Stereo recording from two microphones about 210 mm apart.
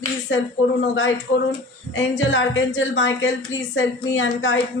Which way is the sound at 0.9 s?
60° left (ahead or behind).